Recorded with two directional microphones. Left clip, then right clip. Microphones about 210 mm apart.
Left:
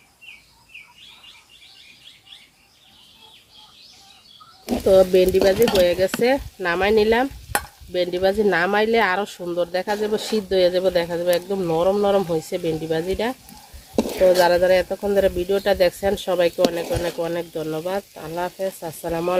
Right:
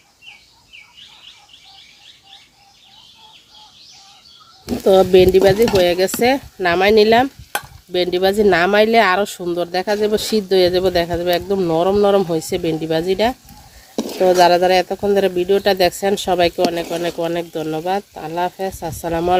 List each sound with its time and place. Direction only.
4.9 s speech: 50° right (ahead or behind)